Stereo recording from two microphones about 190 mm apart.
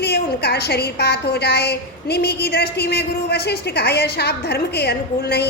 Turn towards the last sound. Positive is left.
turn(degrees=60)  # may be behind; listen again after turning